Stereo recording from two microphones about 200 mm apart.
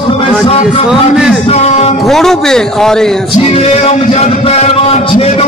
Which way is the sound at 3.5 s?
30° left (ahead or behind).